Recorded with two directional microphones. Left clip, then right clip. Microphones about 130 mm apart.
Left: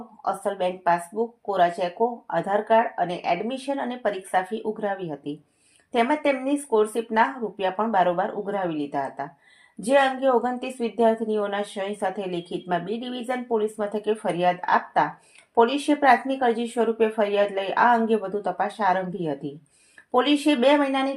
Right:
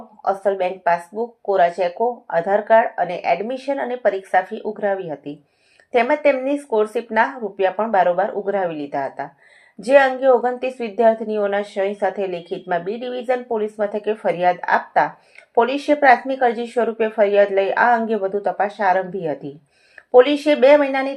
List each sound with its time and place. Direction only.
0.3 s a woman's voice: 20° right (ahead or behind)
15.6 s a woman's voice: 15° right (ahead or behind)